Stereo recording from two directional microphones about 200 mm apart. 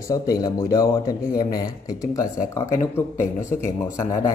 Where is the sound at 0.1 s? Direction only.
20° left (ahead or behind).